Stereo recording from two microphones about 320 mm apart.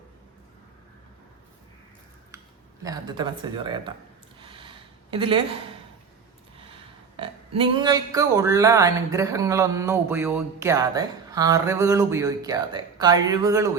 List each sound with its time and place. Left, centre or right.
2.8 s speech: centre
4.4 s a sound: centre
5.1 s speech: centre
7.2 s speech: centre